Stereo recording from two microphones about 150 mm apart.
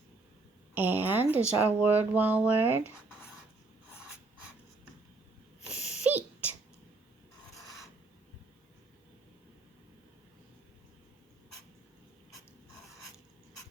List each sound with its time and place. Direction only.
0.7 s speech: 10° right (ahead or behind)
5.7 s sneeze: 45° left (ahead or behind)
6.0 s a sound: 10° right (ahead or behind)